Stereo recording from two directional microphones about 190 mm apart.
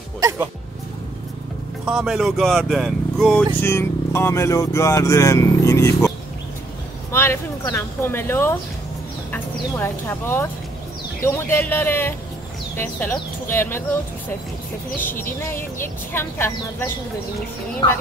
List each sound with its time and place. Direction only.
1.9 s speech: 5° right (ahead or behind)
15.2 s speech: 10° left (ahead or behind)